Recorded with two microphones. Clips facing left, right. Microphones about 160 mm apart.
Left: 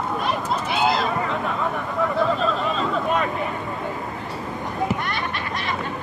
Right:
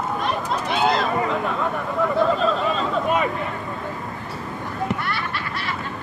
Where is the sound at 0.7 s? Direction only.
Centre (ahead or behind).